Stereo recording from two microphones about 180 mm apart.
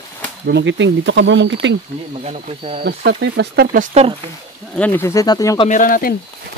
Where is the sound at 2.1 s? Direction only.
35° right (ahead or behind).